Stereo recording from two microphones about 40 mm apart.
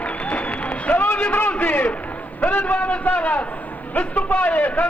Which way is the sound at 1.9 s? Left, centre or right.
Left.